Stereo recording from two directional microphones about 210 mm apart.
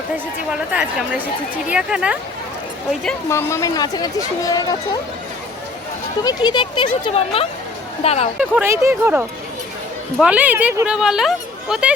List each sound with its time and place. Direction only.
0.5 s speech: 5° right (ahead or behind)
3.2 s speech: 15° left (ahead or behind)
6.2 s speech: 20° left (ahead or behind)
8.4 s speech: 10° right (ahead or behind)